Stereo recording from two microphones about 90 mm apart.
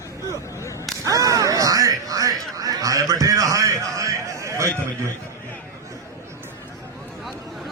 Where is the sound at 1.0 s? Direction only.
40° right (ahead or behind).